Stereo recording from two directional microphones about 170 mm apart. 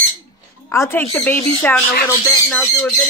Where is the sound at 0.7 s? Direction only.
15° left (ahead or behind).